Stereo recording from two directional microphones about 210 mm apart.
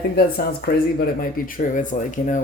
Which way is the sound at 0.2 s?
45° left (ahead or behind).